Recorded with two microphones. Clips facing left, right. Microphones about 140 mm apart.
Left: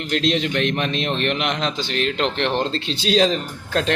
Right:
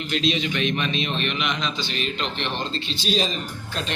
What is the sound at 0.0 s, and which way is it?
A man's voice, 70° left (ahead or behind).